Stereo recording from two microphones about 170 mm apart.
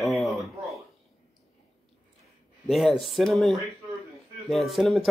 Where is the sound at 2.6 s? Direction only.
Centre (ahead or behind).